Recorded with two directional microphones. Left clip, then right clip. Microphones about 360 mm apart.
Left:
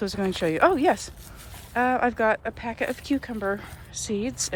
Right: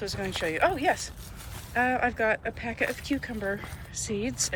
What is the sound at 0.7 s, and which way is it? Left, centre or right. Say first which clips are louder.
Speech: left 4 dB; centre.